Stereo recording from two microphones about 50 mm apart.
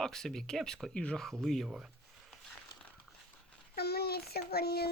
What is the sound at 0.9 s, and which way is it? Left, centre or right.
Speech, left.